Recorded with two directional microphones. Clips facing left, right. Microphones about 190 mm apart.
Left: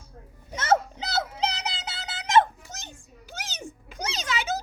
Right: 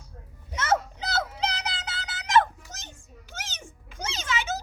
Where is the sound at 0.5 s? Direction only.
30° left (ahead or behind).